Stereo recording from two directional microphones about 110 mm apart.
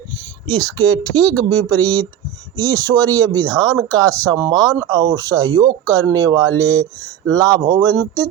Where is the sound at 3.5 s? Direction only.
5° left (ahead or behind).